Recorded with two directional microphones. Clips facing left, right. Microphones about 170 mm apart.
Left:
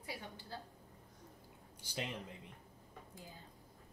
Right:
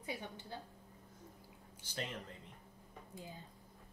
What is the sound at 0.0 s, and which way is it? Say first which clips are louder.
Speech: right 3 dB; 20° right (ahead or behind).